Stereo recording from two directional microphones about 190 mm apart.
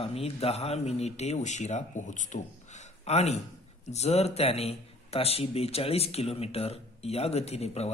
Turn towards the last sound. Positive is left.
turn(degrees=35)  # may be behind; listen again after turning